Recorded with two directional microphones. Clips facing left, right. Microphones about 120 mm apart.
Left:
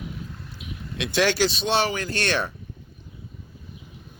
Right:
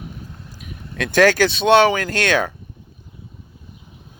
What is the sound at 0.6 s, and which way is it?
Speech, 45° right (ahead or behind).